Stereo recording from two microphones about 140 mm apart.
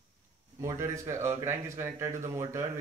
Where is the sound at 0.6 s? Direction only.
20° right (ahead or behind).